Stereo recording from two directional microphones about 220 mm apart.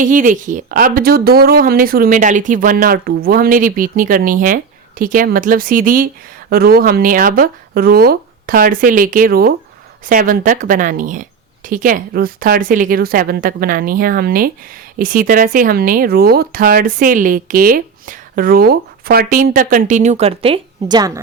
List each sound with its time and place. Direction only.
0.0 s speech: 35° right (ahead or behind); by 21.1 s 20° right (ahead or behind)